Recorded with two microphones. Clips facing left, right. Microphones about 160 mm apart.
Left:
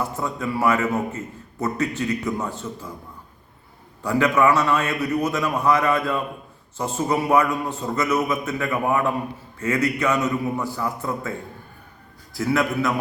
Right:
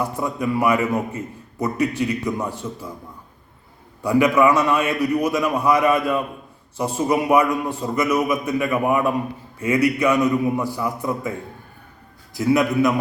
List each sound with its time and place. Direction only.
0.2 s a man's voice: 15° right (ahead or behind)
4.0 s a man's voice: 10° right (ahead or behind)